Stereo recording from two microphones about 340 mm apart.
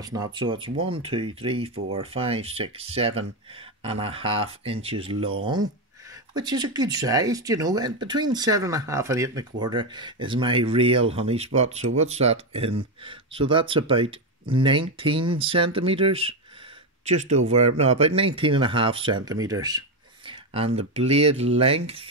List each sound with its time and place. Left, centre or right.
0.0 s speech: centre